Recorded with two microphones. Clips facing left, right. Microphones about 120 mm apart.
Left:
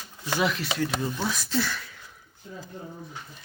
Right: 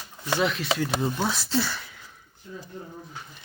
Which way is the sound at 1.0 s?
30° right (ahead or behind).